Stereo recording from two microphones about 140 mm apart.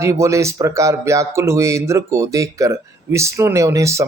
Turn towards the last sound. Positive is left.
turn(degrees=-20)  # may be behind; listen again after turning